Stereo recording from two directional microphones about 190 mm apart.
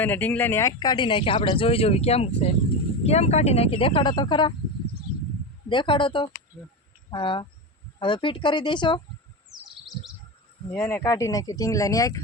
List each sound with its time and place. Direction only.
0.0 s speech: 10° left (ahead or behind)
5.6 s speech: 25° left (ahead or behind)
9.5 s bird: centre (ahead or behind)
10.8 s speech: 15° left (ahead or behind)